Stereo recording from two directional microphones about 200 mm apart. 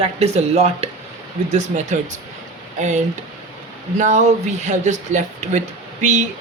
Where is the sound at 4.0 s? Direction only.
35° right (ahead or behind).